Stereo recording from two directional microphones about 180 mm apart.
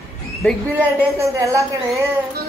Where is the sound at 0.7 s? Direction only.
15° right (ahead or behind).